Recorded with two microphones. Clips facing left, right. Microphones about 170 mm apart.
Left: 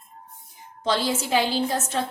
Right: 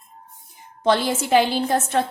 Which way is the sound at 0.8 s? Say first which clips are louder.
Right 4 dB; 60° right (ahead or behind).